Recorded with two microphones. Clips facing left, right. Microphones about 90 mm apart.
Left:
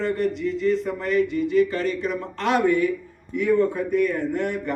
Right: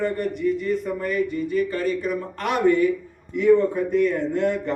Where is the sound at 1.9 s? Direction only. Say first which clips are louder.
Right 1 dB; 25° left (ahead or behind).